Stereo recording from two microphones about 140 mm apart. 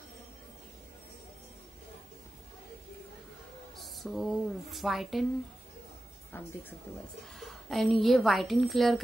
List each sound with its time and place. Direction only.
3.7 s a woman's voice: centre (ahead or behind)
6.3 s a sound: 15° left (ahead or behind)
7.3 s a woman's voice: centre (ahead or behind)